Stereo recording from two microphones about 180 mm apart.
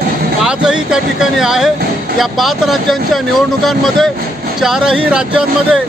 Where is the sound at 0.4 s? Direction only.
5° right (ahead or behind).